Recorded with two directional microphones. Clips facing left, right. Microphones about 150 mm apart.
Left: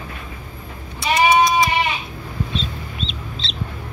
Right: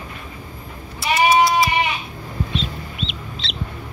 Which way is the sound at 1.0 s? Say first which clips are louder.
Even; 5° right (ahead or behind).